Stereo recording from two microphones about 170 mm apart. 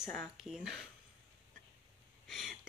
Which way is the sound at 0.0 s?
5° left (ahead or behind).